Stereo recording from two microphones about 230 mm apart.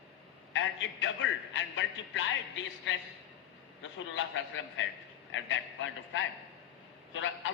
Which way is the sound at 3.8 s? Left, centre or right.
Left.